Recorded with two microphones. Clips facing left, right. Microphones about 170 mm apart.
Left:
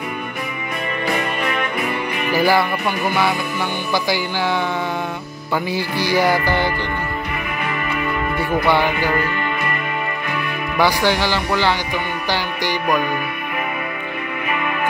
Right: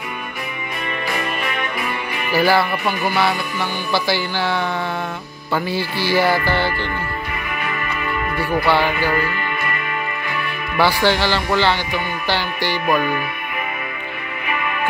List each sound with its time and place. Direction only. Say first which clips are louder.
2.3 s music: even; 15° left (ahead or behind)
3.9 s music: right 1 dB; 15° left (ahead or behind)
8.6 s music: even; 20° left (ahead or behind)
10.8 s music: right 1 dB; 15° left (ahead or behind)